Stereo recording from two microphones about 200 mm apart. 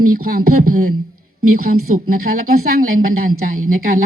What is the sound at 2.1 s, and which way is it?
Speech, 45° right (ahead or behind).